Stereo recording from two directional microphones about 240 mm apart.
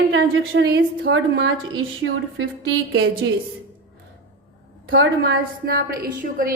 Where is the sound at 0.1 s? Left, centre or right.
Right.